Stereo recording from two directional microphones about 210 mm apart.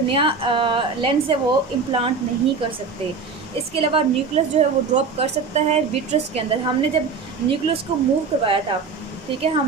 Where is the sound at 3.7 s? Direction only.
30° right (ahead or behind).